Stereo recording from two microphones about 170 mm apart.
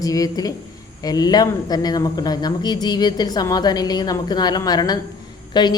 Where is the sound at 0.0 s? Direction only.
20° left (ahead or behind).